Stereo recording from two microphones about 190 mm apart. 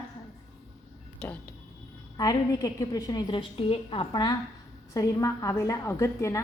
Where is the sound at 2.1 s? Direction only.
20° left (ahead or behind).